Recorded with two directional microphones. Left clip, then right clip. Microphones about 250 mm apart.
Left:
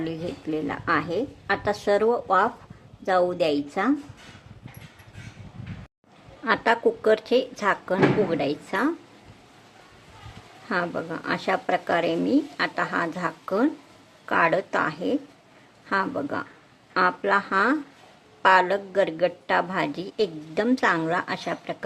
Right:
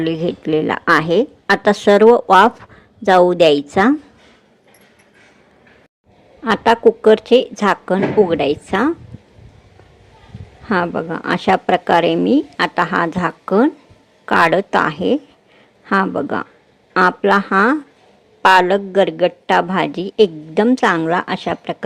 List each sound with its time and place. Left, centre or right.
0.0 s a woman's voice: right
6.4 s a woman's voice: right
10.7 s a woman's voice: right